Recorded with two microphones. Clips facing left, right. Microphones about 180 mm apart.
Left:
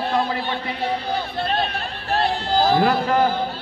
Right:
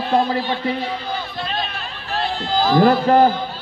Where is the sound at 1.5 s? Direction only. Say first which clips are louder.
Left 3 dB; 60° left (ahead or behind).